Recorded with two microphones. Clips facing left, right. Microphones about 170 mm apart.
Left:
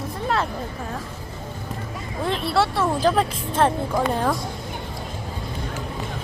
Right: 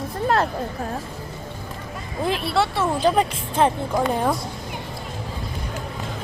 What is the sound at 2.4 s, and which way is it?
A woman's voice, centre (ahead or behind).